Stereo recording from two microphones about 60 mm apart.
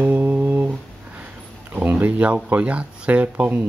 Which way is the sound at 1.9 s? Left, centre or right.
Right.